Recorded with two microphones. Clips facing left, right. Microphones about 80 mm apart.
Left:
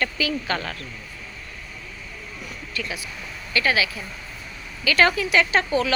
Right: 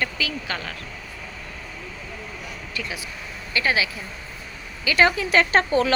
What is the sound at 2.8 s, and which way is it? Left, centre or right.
Speech, centre.